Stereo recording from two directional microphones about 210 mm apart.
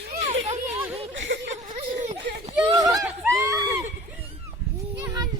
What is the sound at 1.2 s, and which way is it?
Chuckle, 60° right (ahead or behind).